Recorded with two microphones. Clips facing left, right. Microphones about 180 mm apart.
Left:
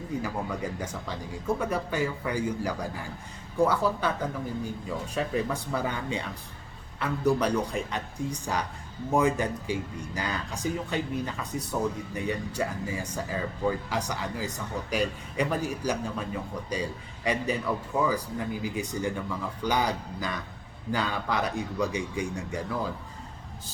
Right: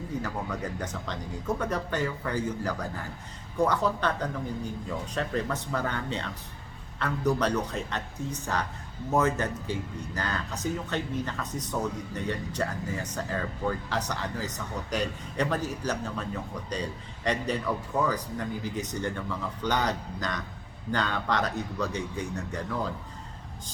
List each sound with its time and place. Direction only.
0.1 s speech: 10° left (ahead or behind)